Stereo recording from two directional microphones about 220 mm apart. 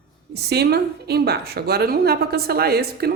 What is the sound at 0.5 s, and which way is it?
A woman's voice, 45° right (ahead or behind).